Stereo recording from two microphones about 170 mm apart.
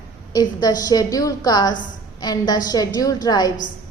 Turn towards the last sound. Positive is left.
turn(degrees=25)  # may be behind; listen again after turning